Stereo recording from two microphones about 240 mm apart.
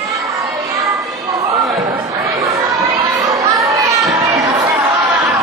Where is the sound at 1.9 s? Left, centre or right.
Centre.